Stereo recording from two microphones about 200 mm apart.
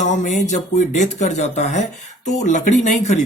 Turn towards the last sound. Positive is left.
turn(degrees=35)  # may be behind; listen again after turning